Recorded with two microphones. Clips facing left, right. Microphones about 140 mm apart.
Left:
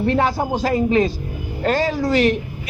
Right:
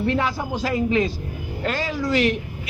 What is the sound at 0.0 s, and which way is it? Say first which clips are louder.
A man's voice: left 4 dB; 35° left (ahead or behind).